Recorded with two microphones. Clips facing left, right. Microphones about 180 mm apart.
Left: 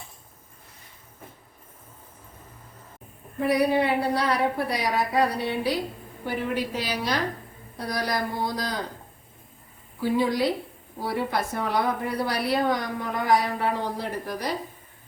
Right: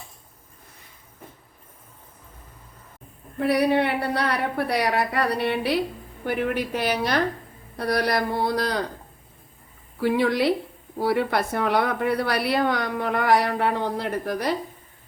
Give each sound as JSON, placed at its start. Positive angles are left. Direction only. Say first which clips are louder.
{"t": 3.4, "sound": "a woman's voice", "louder": "right 1 dB", "side_deg": -70}
{"t": 10.0, "sound": "a woman's voice", "louder": "right 2 dB", "side_deg": -70}